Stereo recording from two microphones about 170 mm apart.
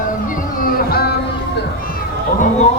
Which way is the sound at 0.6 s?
65° left (ahead or behind).